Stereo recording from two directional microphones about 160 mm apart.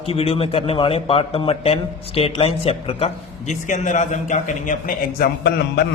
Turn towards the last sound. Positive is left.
turn(degrees=80)